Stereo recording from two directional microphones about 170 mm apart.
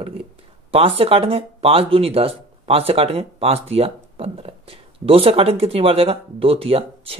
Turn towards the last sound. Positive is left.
turn(degrees=-35)  # may be behind; listen again after turning